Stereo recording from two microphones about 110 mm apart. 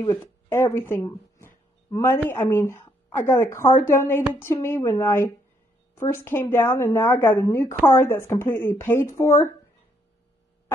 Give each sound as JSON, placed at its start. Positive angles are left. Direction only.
{"t": 0.2, "sound": "a woman's voice", "side_deg": 20}